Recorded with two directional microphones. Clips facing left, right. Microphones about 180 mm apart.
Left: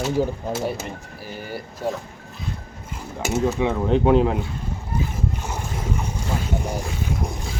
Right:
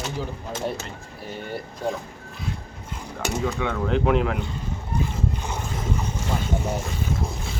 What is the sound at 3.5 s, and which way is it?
Speech, 25° left (ahead or behind).